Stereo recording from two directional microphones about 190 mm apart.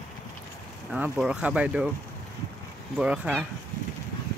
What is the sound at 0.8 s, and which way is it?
Speech, 5° right (ahead or behind).